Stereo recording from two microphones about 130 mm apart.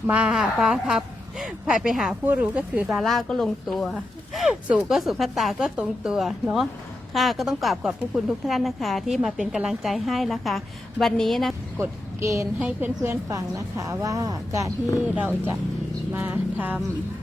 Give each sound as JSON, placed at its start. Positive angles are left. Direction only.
{"t": 0.1, "sound": "a woman's voice", "side_deg": -10}
{"t": 2.9, "sound": "a woman's voice", "side_deg": 0}
{"t": 11.8, "sound": "a woman's voice", "side_deg": -25}
{"t": 12.5, "sound": "a woman's voice", "side_deg": -10}
{"t": 16.1, "sound": "speech", "side_deg": -15}